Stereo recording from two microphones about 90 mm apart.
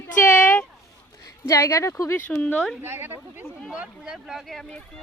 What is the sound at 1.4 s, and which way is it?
Speech, 40° left (ahead or behind).